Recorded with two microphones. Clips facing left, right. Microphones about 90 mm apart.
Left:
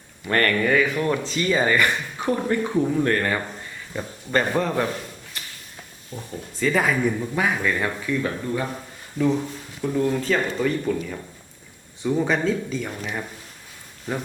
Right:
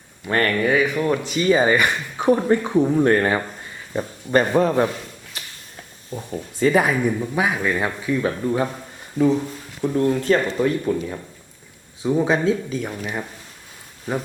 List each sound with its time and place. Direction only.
0.3 s speech: 15° right (ahead or behind)
6.1 s speech: 25° right (ahead or behind)
9.8 s speech: 20° right (ahead or behind)